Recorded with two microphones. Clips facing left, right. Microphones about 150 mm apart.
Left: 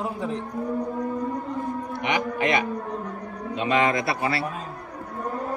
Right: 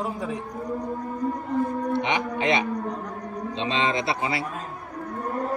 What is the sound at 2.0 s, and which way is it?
A man's voice, 20° right (ahead or behind).